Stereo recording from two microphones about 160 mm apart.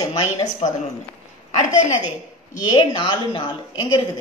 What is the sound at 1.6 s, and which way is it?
Speech, 50° left (ahead or behind).